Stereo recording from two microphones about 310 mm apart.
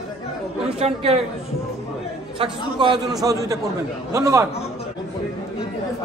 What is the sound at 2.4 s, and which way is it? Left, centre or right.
A man's voice, centre.